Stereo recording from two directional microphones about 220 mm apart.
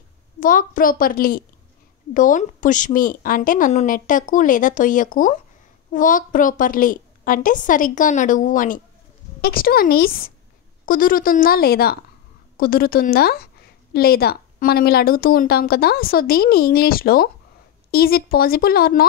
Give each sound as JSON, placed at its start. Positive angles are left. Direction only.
{"t": 0.4, "sound": "a woman's voice", "side_deg": 40}